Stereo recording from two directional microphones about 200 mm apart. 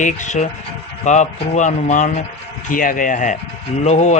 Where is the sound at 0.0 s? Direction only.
40° left (ahead or behind).